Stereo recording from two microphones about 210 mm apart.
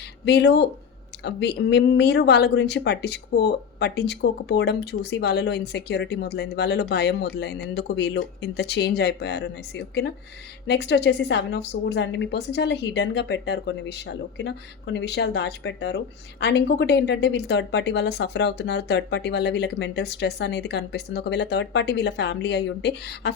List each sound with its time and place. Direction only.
0.3 s a woman's voice: 50° left (ahead or behind)